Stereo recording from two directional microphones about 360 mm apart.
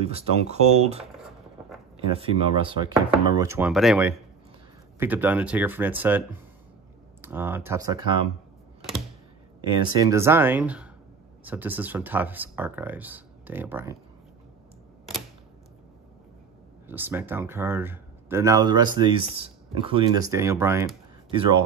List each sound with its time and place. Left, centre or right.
0.0 s speech: centre
9.9 s speech: centre
16.8 s speech: centre